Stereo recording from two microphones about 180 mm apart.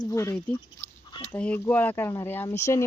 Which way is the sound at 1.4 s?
10° left (ahead or behind).